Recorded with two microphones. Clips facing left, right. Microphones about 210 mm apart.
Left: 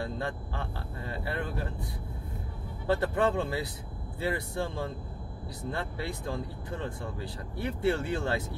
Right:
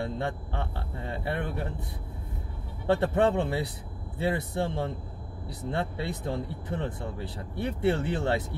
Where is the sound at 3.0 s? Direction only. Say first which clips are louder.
Right 4 dB; 25° right (ahead or behind).